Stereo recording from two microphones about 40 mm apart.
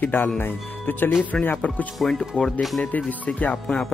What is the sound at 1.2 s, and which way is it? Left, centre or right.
Speech, left.